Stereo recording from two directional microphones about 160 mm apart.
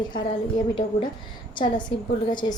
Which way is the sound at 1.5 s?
30° left (ahead or behind).